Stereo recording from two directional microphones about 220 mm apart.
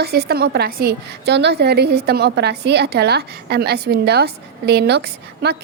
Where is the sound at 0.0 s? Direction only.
45° right (ahead or behind).